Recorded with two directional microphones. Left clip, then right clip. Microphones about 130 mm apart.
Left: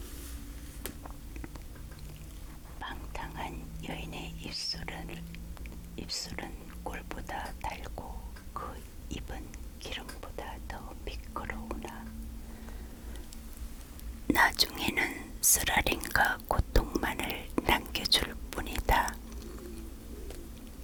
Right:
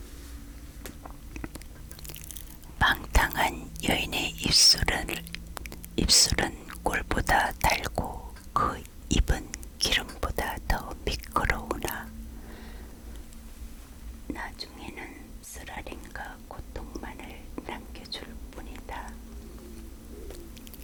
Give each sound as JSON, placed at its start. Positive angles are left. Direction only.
{"t": 1.0, "sound": "a sound", "side_deg": -15}
{"t": 2.7, "sound": "whispering", "side_deg": -30}
{"t": 14.3, "sound": "whispering", "side_deg": 20}